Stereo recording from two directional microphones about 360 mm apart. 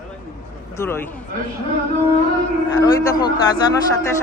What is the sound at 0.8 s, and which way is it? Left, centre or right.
Speech, centre.